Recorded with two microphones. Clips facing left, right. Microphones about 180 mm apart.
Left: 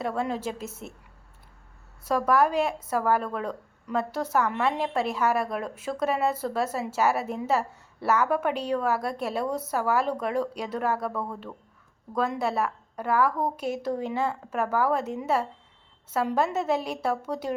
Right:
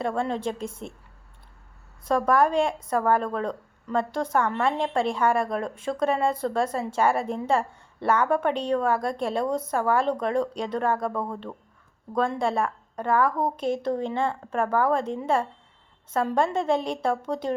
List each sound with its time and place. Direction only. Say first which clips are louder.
0.0 s a woman's voice: right 2 dB; 5° left (ahead or behind)
2.0 s speech: right 1 dB; 5° left (ahead or behind)
12.1 s speech: right 2 dB; 5° left (ahead or behind)